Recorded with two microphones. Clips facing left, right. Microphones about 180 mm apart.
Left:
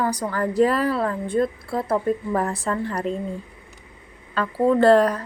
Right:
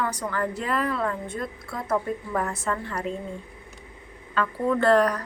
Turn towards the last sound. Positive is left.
turn(degrees=30)  # may be behind; listen again after turning